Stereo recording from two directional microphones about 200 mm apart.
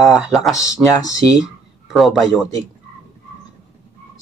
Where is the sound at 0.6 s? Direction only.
15° left (ahead or behind).